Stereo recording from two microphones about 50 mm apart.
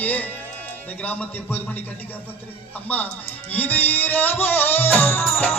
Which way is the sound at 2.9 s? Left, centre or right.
Left.